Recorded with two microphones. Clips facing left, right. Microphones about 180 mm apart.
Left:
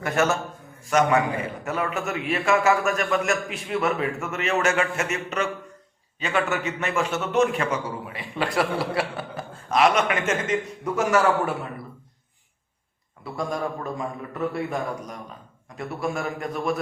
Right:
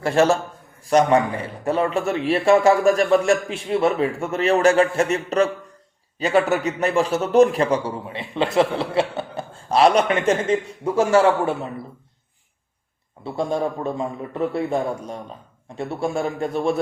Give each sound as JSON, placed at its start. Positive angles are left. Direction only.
{"t": 0.0, "sound": "a man's voice", "side_deg": -30}
{"t": 13.2, "sound": "a man's voice", "side_deg": -30}